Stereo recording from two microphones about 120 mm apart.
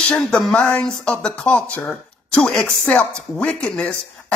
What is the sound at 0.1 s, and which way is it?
A woman's voice, 5° left (ahead or behind).